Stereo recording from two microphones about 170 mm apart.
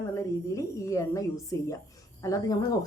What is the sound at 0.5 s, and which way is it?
A woman's voice, 20° left (ahead or behind).